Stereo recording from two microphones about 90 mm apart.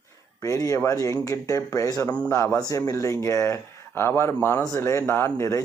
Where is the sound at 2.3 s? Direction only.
30° left (ahead or behind).